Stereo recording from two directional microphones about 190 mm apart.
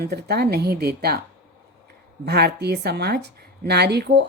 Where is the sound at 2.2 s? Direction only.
60° right (ahead or behind).